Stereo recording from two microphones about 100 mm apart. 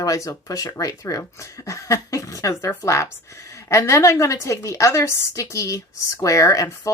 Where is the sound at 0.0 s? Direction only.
35° left (ahead or behind).